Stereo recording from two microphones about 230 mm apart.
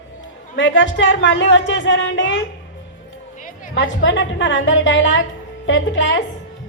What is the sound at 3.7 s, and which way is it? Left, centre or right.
A woman's voice, left.